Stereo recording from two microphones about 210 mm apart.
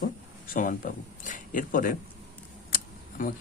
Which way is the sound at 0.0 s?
40° left (ahead or behind).